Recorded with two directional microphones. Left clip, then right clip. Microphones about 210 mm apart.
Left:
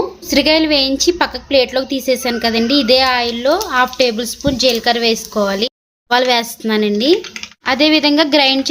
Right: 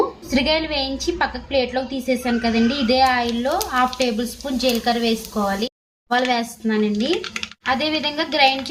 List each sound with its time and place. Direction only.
0.3 s a woman's voice: 55° left (ahead or behind)